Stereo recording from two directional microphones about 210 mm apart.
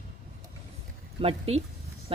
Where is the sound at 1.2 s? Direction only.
30° right (ahead or behind).